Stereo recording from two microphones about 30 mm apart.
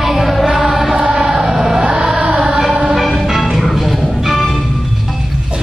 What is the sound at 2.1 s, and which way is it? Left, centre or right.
Music, right.